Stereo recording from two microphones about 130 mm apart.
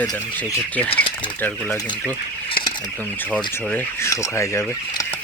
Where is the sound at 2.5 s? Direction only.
40° left (ahead or behind).